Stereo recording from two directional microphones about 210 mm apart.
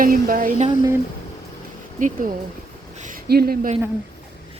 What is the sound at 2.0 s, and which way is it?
Speech, 40° right (ahead or behind).